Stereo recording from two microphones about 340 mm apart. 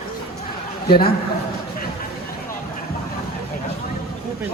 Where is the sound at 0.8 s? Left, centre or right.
Left.